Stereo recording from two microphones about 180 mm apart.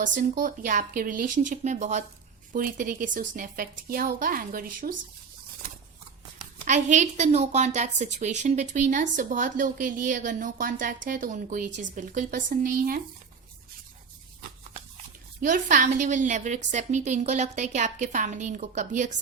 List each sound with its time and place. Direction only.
0.0 s a woman's voice: 45° right (ahead or behind)
6.4 s a woman's voice: 45° right (ahead or behind)
15.4 s a woman's voice: 45° right (ahead or behind)